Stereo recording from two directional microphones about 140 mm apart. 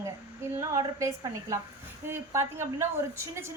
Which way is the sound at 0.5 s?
20° right (ahead or behind).